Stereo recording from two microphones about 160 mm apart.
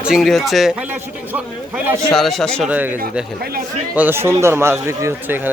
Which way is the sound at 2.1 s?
Centre (ahead or behind).